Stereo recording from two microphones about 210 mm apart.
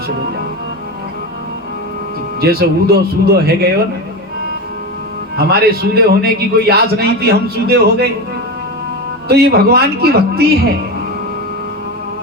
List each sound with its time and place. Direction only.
2.4 s a man's voice: 45° right (ahead or behind)
5.4 s a man's voice: 50° right (ahead or behind)
9.3 s a man's voice: 50° right (ahead or behind)